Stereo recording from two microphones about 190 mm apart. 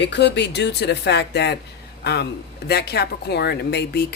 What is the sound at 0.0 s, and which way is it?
Speech, 65° left (ahead or behind).